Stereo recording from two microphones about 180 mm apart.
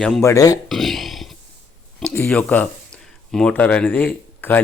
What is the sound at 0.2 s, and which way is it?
Speech, 15° left (ahead or behind).